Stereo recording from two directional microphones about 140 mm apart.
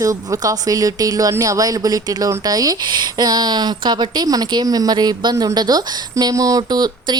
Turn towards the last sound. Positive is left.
turn(degrees=-30)  # may be behind; listen again after turning